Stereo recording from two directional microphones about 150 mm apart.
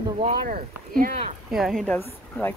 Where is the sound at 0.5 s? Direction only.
70° right (ahead or behind).